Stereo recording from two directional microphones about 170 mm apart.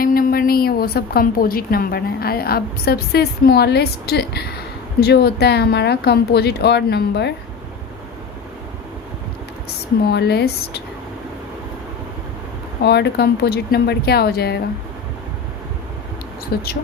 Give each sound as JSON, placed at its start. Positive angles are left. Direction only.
{"t": 0.0, "sound": "a woman's voice", "side_deg": 60}
{"t": 9.6, "sound": "a woman's voice", "side_deg": 70}
{"t": 12.8, "sound": "a woman's voice", "side_deg": 75}
{"t": 16.5, "sound": "a woman's voice", "side_deg": 65}